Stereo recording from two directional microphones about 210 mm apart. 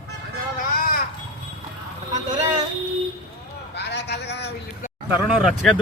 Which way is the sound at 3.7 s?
55° left (ahead or behind).